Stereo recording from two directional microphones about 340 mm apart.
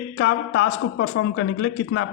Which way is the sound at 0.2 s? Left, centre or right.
Left.